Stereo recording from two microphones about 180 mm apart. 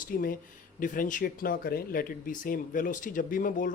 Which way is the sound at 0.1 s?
50° left (ahead or behind).